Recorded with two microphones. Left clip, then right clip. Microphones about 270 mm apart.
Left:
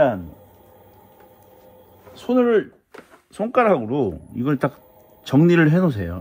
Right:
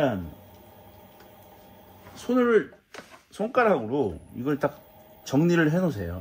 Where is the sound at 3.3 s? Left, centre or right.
Left.